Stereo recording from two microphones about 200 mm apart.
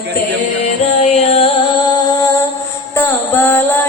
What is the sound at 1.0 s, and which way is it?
Music, 30° left (ahead or behind).